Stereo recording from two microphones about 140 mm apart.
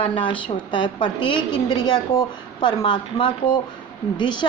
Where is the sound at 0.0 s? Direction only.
35° left (ahead or behind).